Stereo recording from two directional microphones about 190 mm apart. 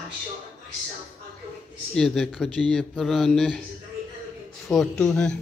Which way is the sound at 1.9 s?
5° left (ahead or behind).